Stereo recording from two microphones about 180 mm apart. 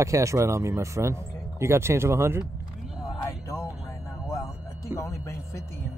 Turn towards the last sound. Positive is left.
turn(degrees=15)  # may be behind; listen again after turning